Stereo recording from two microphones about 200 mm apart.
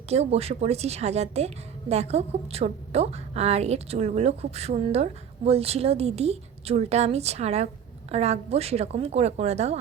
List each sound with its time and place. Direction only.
0.1 s a woman's voice: 30° right (ahead or behind)